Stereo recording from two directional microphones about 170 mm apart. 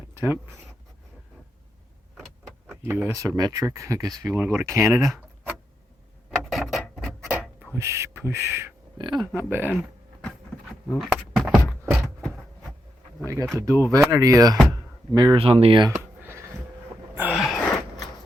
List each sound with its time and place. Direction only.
0.1 s writing: 15° right (ahead or behind)
2.6 s speech: 15° right (ahead or behind)
4.9 s a sound: centre (ahead or behind)
7.8 s speech: 15° right (ahead or behind)
9.0 s speech: 25° right (ahead or behind)
10.8 s a sound: centre (ahead or behind)
13.2 s speech: 15° right (ahead or behind)
17.2 s gasp: 5° right (ahead or behind)